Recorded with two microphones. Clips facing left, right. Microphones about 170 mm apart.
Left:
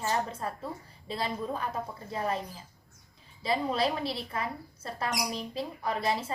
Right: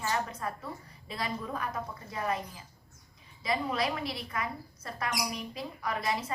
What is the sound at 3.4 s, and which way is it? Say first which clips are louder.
Speech: left 3 dB; 30° left (ahead or behind).